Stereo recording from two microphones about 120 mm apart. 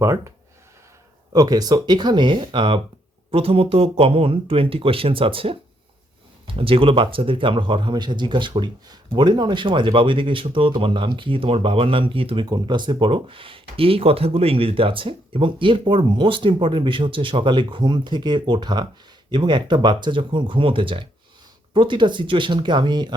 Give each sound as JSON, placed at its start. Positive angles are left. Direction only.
{"t": 0.0, "sound": "speech", "side_deg": -25}
{"t": 12.5, "sound": "speech", "side_deg": -35}